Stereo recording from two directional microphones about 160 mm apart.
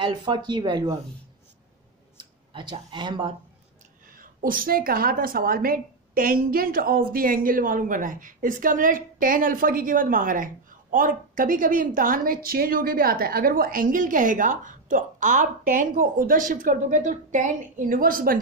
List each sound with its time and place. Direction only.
0.0 s speech: 30° right (ahead or behind)
2.5 s speech: 30° right (ahead or behind)
4.1 s a woman's voice: 60° right (ahead or behind)